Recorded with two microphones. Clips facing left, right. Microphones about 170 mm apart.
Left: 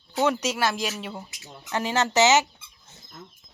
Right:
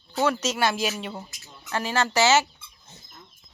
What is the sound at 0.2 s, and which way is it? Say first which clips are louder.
Speech: left 1 dB; 15° left (ahead or behind).